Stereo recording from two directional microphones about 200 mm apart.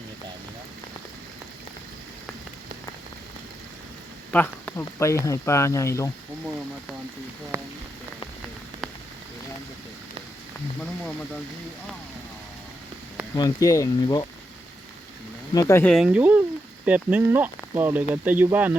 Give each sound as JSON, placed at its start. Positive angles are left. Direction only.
{"t": 4.3, "sound": "speech", "side_deg": 5}
{"t": 7.5, "sound": "speech", "side_deg": -10}
{"t": 13.3, "sound": "speech", "side_deg": 15}
{"t": 15.5, "sound": "speech", "side_deg": 15}